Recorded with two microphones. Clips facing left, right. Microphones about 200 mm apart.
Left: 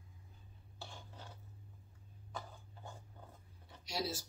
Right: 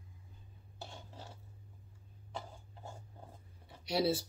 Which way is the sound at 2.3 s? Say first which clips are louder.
Right 3 dB; 25° right (ahead or behind).